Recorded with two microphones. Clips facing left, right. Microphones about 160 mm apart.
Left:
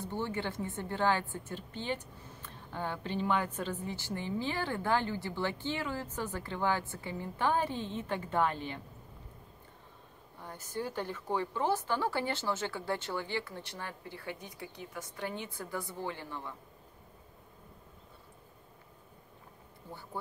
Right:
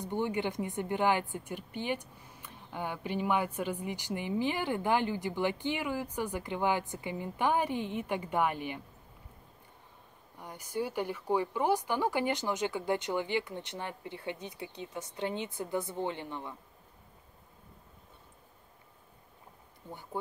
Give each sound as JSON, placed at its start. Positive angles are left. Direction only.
{"t": 0.0, "sound": "a woman's voice", "side_deg": -15}
{"t": 10.4, "sound": "a woman's voice", "side_deg": -15}
{"t": 19.9, "sound": "speech", "side_deg": -20}